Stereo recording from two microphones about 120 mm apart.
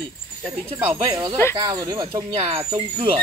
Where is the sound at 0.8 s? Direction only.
45° right (ahead or behind).